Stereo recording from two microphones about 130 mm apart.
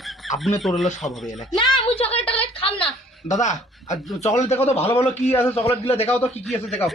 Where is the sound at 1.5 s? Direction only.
35° left (ahead or behind).